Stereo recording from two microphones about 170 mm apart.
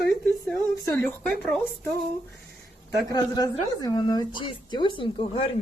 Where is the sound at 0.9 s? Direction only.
15° left (ahead or behind).